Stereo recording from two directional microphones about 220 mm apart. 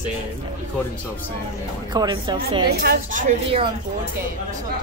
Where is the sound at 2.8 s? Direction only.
40° right (ahead or behind).